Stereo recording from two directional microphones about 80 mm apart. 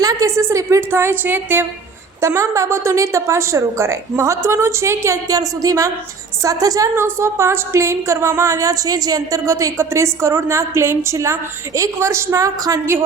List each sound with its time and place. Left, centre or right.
0.0 s a woman's voice: right
2.2 s a woman's voice: right
6.9 s a woman's voice: right